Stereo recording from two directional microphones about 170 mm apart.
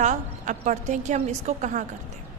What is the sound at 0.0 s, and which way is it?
A woman's voice, 45° right (ahead or behind).